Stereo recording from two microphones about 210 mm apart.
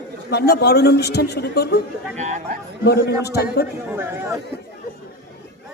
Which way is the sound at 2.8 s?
50° left (ahead or behind).